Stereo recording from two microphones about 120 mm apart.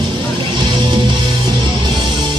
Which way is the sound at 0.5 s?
40° right (ahead or behind).